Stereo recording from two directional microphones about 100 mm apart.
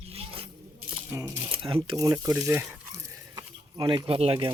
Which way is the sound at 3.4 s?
45° right (ahead or behind).